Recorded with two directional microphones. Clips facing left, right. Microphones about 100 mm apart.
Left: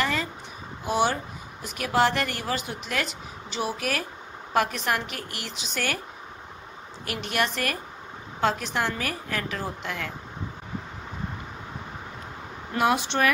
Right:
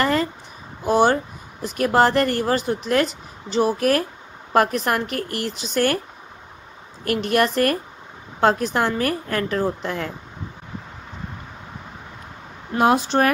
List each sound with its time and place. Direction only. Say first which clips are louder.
0.0 s a sound: right 7 dB; 45° right (ahead or behind)
0.8 s a woman's voice: right 7 dB; 45° right (ahead or behind)
7.1 s a woman's voice: right 8 dB; 45° right (ahead or behind)
12.7 s speech: right 6 dB; 35° right (ahead or behind)